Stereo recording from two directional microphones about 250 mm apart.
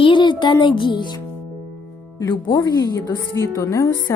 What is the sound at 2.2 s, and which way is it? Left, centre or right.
Speech, centre.